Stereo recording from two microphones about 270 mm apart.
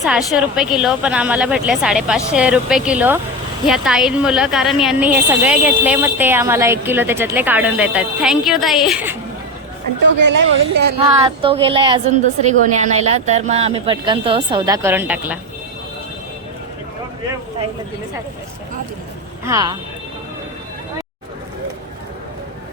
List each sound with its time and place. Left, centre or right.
0.0 s a woman's voice: centre
10.2 s a woman's voice: right
11.4 s a woman's voice: centre
19.5 s speech: centre